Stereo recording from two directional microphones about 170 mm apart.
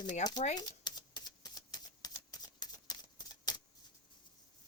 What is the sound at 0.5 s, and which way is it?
Typewriter, 25° left (ahead or behind).